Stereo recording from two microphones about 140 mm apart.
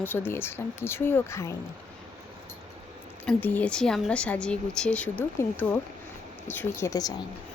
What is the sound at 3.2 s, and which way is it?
Speech, 10° left (ahead or behind).